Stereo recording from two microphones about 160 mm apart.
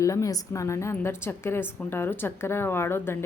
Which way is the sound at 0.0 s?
20° left (ahead or behind).